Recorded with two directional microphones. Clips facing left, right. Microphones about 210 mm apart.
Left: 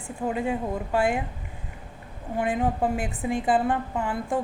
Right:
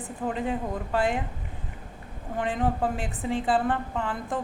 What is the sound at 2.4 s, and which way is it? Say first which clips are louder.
Speech: left 2 dB; 10° left (ahead or behind).